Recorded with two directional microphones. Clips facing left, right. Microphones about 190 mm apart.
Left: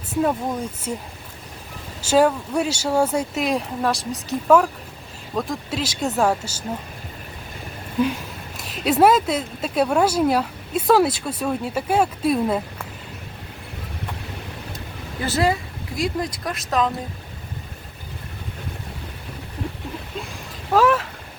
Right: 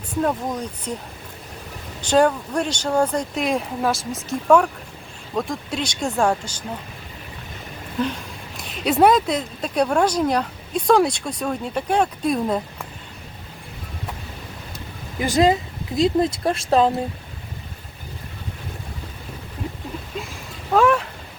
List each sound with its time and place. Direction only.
0.1 s speech: 5° left (ahead or behind)
2.0 s speech: 5° left (ahead or behind)
7.9 s speech: 10° left (ahead or behind)
15.2 s speech: 15° right (ahead or behind)
20.7 s a sound: centre (ahead or behind)